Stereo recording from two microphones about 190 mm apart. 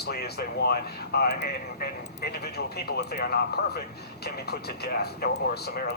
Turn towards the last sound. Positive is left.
turn(degrees=55)  # may be behind; listen again after turning